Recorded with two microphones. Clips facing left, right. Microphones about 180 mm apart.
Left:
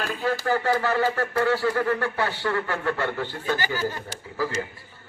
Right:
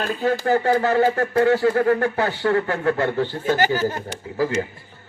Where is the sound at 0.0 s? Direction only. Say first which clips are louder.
Right 5 dB; 40° right (ahead or behind).